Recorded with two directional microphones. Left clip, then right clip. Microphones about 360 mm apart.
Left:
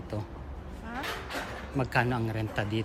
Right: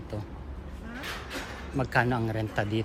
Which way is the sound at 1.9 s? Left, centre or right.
Centre.